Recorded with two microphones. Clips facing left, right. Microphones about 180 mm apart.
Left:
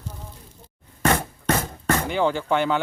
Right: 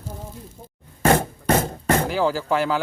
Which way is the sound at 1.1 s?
30° right (ahead or behind).